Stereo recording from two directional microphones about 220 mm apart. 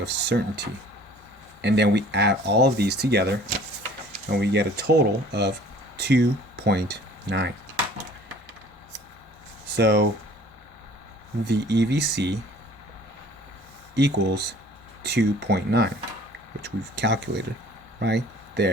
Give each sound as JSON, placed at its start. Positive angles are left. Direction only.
{"t": 0.0, "sound": "speech", "side_deg": -50}
{"t": 9.6, "sound": "speech", "side_deg": -50}
{"t": 11.4, "sound": "speech", "side_deg": -50}
{"t": 13.9, "sound": "speech", "side_deg": -50}